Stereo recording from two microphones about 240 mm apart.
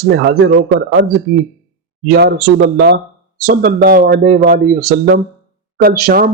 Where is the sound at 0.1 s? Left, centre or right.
Right.